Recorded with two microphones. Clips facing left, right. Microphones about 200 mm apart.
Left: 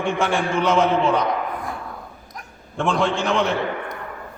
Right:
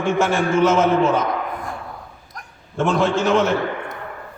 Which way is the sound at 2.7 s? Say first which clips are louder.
Right 3 dB; 5° right (ahead or behind).